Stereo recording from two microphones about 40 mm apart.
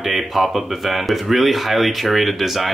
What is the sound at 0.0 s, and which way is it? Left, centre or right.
Speech, centre.